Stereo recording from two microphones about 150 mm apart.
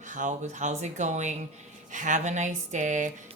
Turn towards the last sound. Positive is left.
turn(degrees=-55)  # may be behind; listen again after turning